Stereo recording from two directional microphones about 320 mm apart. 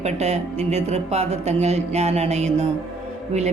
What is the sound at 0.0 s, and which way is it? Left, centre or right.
Speech, centre.